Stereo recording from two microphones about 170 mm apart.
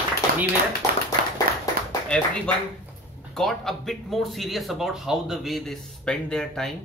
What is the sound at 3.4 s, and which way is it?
Speech, centre (ahead or behind).